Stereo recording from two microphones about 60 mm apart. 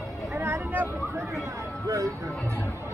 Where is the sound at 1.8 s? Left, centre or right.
Right.